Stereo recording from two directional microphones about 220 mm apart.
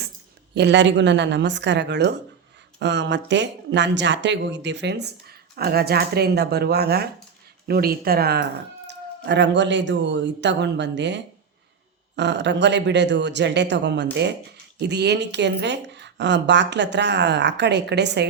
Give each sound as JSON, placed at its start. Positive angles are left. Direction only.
{"t": 0.5, "sound": "a woman's voice", "side_deg": -50}